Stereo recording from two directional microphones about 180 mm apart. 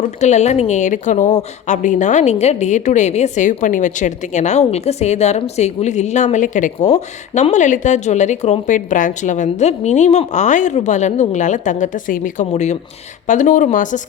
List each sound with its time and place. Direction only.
0.2 s a woman's voice: 40° left (ahead or behind)